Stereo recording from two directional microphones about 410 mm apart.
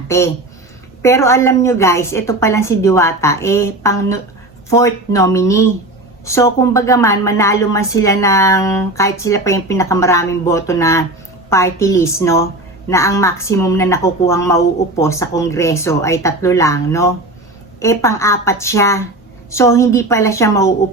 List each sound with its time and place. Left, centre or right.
0.1 s a woman's voice: centre